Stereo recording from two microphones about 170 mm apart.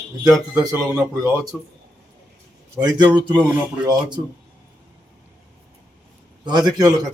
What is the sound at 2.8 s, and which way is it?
Speech, 25° right (ahead or behind).